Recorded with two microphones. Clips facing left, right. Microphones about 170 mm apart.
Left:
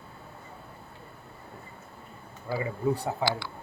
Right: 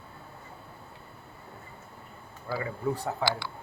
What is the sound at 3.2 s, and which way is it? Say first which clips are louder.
Speech: even; 15° left (ahead or behind).